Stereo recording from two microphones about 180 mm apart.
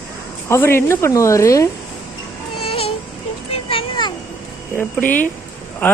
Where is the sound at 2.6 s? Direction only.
30° left (ahead or behind).